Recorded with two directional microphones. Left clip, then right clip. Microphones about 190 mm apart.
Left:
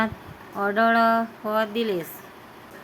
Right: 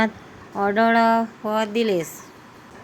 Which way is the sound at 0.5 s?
20° right (ahead or behind).